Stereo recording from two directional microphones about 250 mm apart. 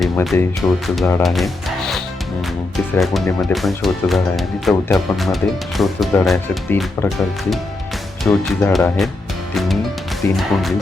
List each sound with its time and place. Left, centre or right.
0.0 s speech: centre
1.2 s music: centre
3.0 s speech: centre
10.2 s speech: centre